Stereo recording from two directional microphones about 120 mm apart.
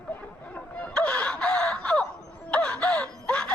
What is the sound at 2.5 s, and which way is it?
Wail, 10° left (ahead or behind).